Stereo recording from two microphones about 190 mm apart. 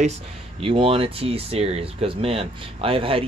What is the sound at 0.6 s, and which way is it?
Speech, 30° right (ahead or behind).